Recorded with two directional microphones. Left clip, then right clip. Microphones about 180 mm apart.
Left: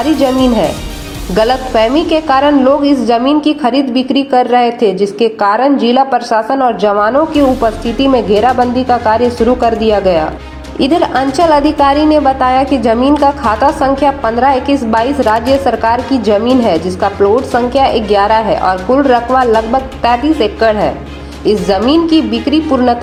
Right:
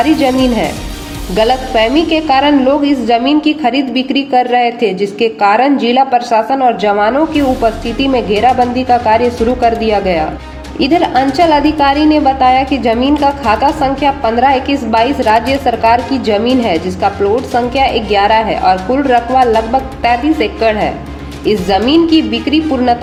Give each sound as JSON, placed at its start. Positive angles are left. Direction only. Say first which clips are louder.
{"t": 0.0, "sound": "a woman's voice", "louder": "even", "side_deg": 25}